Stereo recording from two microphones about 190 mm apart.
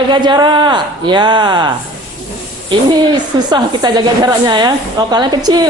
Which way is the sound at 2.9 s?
25° right (ahead or behind).